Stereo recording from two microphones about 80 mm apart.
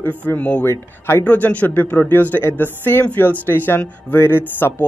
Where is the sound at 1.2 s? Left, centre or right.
Left.